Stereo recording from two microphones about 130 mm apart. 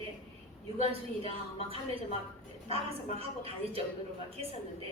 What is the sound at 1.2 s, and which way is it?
Speech, 50° left (ahead or behind).